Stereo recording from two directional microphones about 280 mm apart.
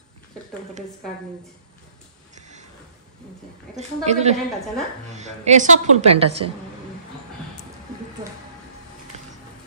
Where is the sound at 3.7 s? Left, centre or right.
Right.